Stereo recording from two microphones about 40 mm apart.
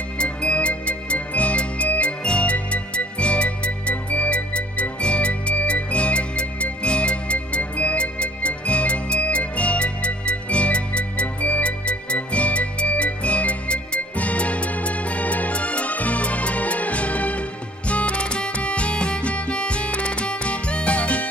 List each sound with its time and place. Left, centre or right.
0.2 s music: left